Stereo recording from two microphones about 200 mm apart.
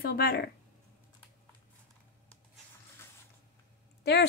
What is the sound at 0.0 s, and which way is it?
Speech, 50° left (ahead or behind).